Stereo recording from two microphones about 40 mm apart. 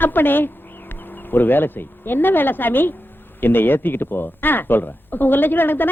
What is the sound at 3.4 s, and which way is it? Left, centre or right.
Speech, left.